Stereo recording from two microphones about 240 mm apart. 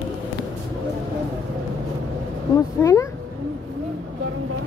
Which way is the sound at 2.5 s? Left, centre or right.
Centre.